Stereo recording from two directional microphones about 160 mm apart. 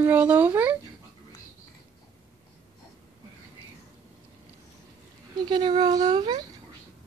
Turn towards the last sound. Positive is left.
turn(degrees=-30)  # may be behind; listen again after turning